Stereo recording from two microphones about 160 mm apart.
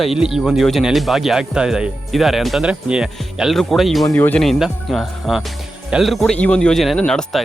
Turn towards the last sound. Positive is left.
turn(degrees=5)  # may be behind; listen again after turning